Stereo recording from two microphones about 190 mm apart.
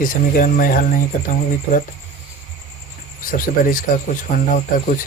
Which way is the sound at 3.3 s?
45° left (ahead or behind).